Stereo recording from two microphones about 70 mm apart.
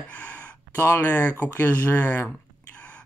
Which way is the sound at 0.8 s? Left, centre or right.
Left.